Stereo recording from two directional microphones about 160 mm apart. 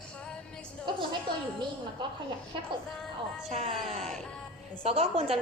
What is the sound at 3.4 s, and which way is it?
A woman's voice, 40° right (ahead or behind).